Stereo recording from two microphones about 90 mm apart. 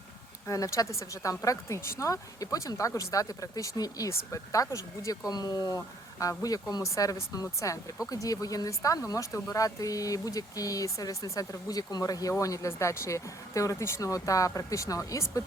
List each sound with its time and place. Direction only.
0.4 s speech: 35° left (ahead or behind)